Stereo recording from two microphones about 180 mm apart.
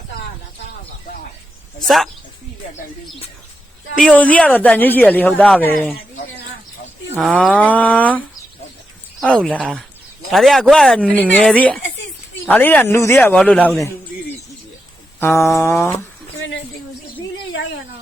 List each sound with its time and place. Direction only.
4.2 s speech: 5° left (ahead or behind)
7.2 s speech: centre (ahead or behind)
9.2 s speech: 5° left (ahead or behind)
15.2 s speech: 15° left (ahead or behind)